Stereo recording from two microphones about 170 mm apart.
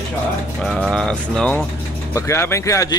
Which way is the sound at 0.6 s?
Centre (ahead or behind).